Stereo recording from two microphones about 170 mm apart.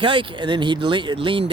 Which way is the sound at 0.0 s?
30° right (ahead or behind).